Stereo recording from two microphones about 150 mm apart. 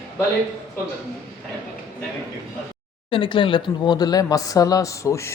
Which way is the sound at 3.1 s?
35° left (ahead or behind).